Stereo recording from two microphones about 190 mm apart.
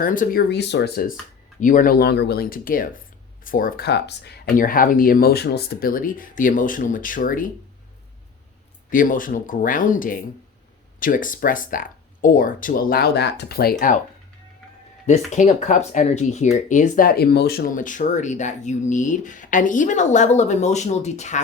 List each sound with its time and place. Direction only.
0.0 s speech: 45° left (ahead or behind)
1.6 s speech: 45° left (ahead or behind)
8.9 s speech: 45° left (ahead or behind)
15.3 s speech: 40° left (ahead or behind)